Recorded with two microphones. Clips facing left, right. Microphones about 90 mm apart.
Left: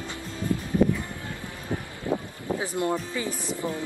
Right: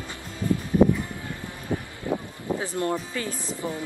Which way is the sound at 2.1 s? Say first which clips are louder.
Even; 20° left (ahead or behind).